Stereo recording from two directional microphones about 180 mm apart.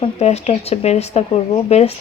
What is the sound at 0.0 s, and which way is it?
Speech, 35° left (ahead or behind).